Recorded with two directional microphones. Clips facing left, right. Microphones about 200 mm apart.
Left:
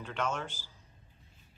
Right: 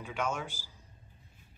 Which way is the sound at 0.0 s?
10° right (ahead or behind).